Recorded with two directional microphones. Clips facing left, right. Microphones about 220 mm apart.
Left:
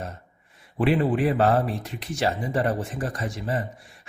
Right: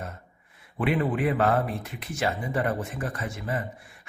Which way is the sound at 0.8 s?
30° left (ahead or behind).